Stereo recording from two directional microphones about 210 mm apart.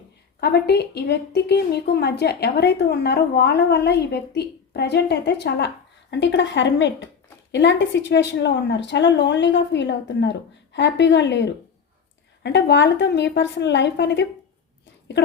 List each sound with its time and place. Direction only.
0.3 s a woman's voice: 50° left (ahead or behind)